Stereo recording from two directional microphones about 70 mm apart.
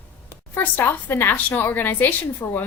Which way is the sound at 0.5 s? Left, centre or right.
Left.